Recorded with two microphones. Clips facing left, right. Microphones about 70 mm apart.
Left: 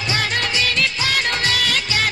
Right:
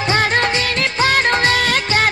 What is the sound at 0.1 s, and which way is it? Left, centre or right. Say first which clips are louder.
Music of bollywood: right 6 dB; right.